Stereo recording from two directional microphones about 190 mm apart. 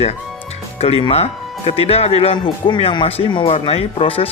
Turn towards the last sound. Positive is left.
turn(degrees=30)  # may be behind; listen again after turning